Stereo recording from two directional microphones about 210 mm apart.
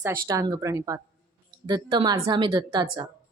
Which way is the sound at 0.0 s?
15° right (ahead or behind).